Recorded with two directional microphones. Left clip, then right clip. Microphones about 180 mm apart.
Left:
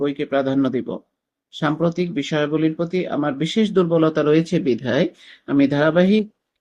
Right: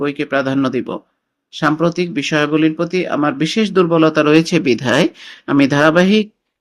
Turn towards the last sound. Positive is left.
turn(degrees=-25)  # may be behind; listen again after turning